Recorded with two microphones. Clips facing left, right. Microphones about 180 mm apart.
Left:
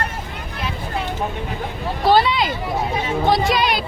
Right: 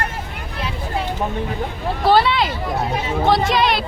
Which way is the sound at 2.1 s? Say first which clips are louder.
Even; centre (ahead or behind).